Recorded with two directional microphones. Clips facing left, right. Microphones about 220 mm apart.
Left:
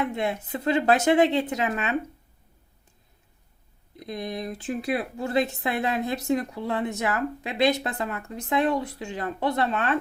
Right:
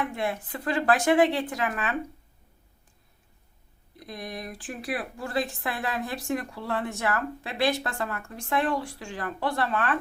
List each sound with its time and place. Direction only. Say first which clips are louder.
0.0 s a woman's voice: left 3 dB; 20° left (ahead or behind)
3.9 s a woman's voice: left 5 dB; 20° left (ahead or behind)